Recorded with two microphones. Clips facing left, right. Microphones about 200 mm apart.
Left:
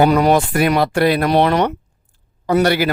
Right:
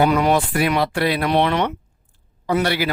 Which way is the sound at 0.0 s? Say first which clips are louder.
Left 4 dB; 40° left (ahead or behind).